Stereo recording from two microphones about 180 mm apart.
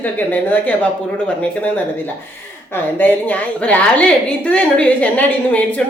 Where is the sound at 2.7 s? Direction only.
10° left (ahead or behind).